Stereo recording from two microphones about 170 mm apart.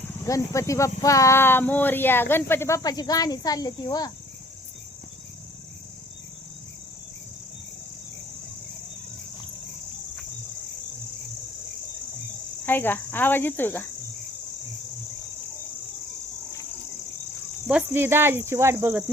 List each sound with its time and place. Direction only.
0.3 s speech: 20° left (ahead or behind)
12.6 s cricket: 10° left (ahead or behind)
17.7 s cricket: 10° right (ahead or behind)